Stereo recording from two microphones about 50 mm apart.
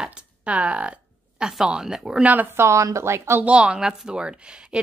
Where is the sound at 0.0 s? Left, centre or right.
Right.